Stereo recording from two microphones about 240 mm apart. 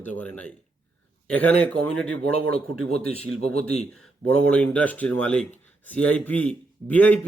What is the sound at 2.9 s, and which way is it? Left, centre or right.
Speech, left.